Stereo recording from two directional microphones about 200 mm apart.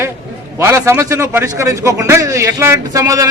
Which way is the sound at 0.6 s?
15° right (ahead or behind).